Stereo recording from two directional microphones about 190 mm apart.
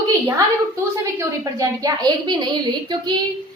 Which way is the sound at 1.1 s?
15° right (ahead or behind).